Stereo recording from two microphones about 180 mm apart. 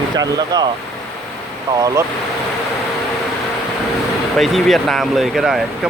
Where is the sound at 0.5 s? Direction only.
20° right (ahead or behind).